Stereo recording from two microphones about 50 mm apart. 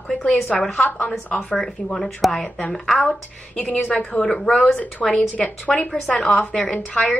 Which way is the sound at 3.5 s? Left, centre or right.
Left.